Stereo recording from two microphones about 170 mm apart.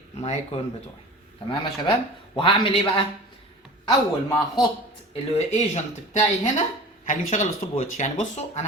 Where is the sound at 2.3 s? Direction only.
30° left (ahead or behind).